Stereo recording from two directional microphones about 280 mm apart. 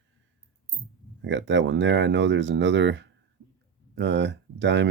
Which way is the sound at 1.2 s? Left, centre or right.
Right.